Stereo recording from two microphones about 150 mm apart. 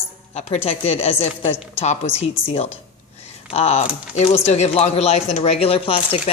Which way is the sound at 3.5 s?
45° left (ahead or behind).